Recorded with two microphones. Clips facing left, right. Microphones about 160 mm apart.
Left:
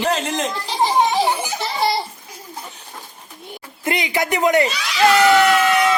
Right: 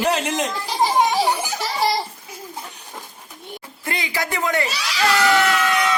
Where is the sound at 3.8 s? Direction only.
20° left (ahead or behind).